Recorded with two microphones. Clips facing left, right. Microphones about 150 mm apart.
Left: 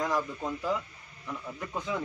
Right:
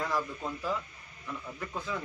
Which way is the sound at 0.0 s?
15° left (ahead or behind).